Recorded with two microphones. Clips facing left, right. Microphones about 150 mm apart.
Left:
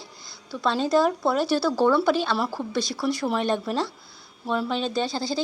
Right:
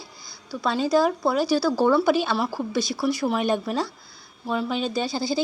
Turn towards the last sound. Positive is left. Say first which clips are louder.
# right 1 dB
turn(degrees=-10)  # may be behind; listen again after turning